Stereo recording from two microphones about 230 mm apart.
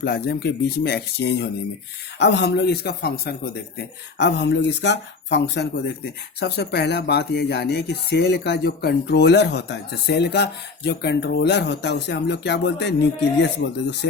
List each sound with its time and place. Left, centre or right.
0.0 s speech: left